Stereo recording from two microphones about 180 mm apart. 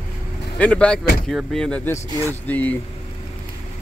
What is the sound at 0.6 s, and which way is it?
Speech, 5° left (ahead or behind).